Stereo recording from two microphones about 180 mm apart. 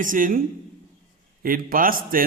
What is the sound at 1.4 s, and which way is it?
Speech, 50° right (ahead or behind).